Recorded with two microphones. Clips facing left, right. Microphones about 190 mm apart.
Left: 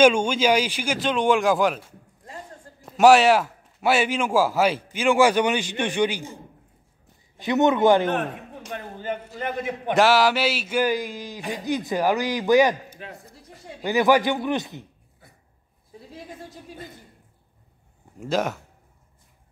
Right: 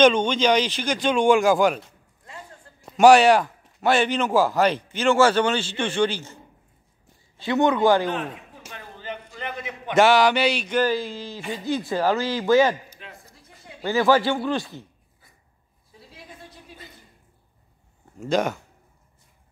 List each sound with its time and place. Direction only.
0.0 s a man's voice: 10° left (ahead or behind)
8.1 s a man's voice: 55° left (ahead or behind)
9.9 s speech: centre (ahead or behind)
12.9 s a sound: 55° left (ahead or behind)
13.8 s speech: 15° left (ahead or behind)
16.4 s a sound: 45° left (ahead or behind)
18.3 s speech: centre (ahead or behind)